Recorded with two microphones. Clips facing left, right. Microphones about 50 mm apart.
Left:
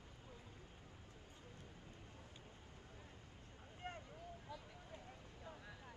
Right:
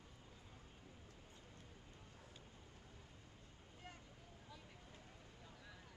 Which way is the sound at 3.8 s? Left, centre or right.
Left.